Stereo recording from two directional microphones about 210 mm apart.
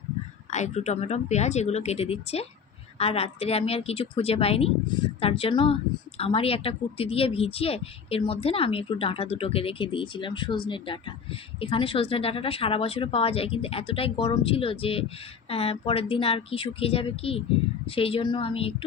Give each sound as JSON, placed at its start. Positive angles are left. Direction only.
{"t": 0.5, "sound": "a woman's voice", "side_deg": 35}